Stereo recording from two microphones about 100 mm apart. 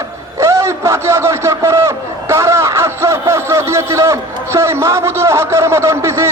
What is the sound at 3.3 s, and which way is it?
A man's voice, 25° right (ahead or behind).